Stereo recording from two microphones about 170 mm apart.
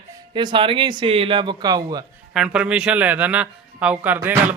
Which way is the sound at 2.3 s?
5° right (ahead or behind).